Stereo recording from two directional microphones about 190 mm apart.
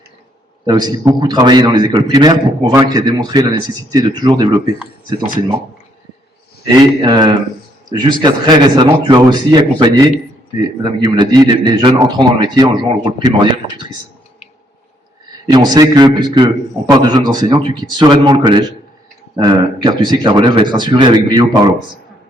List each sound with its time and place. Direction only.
0.6 s a man's voice: 20° right (ahead or behind)
6.7 s a man's voice: 25° right (ahead or behind)
15.5 s a man's voice: 20° right (ahead or behind)